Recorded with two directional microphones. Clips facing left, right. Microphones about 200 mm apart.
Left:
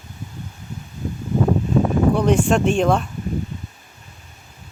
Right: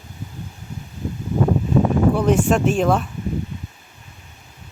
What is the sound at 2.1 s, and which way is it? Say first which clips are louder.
Speech: even; 5° right (ahead or behind).